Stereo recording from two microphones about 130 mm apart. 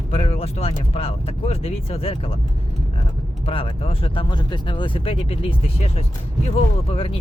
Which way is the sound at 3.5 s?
45° left (ahead or behind).